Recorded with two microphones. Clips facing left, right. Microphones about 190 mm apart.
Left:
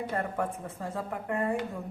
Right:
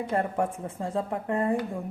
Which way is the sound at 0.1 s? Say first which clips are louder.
Right 7 dB; 30° right (ahead or behind).